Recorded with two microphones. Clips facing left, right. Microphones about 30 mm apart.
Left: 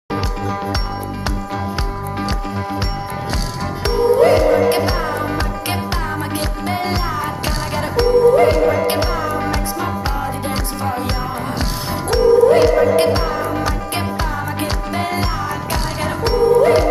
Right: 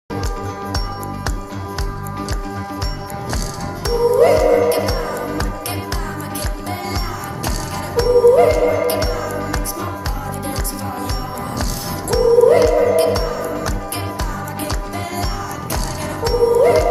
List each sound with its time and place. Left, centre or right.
2.1 s music: left
3.8 s music: left
12.1 s music: left